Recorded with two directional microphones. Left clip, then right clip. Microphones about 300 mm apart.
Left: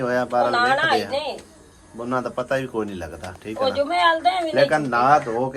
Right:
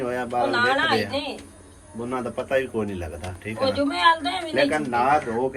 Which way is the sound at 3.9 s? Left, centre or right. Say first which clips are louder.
Left 2 dB; left.